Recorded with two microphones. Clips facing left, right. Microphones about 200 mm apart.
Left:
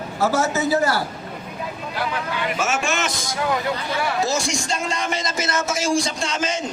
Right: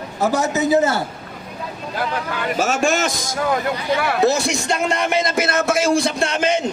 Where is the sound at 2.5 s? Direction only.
40° right (ahead or behind).